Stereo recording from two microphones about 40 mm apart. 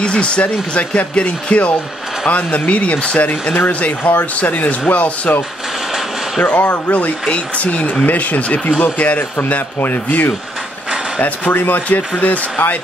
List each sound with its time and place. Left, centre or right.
0.0 s speech: left
6.4 s speech: left
7.2 s speech: left
9.4 s speech: left
11.1 s speech: left